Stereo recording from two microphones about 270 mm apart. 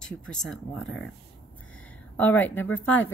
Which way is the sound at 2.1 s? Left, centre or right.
Centre.